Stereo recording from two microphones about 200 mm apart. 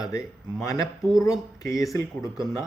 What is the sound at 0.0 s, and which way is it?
Speech, 15° left (ahead or behind).